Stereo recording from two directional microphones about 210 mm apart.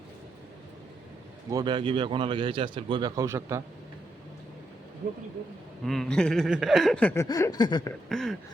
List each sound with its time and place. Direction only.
1.5 s a man's voice: 20° right (ahead or behind)
5.8 s speech: centre (ahead or behind); by 7.9 s 20° left (ahead or behind)
8.1 s speech: centre (ahead or behind)